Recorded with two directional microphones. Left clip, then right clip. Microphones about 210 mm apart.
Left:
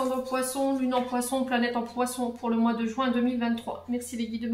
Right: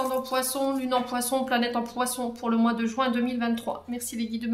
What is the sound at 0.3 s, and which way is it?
Speech, 45° right (ahead or behind).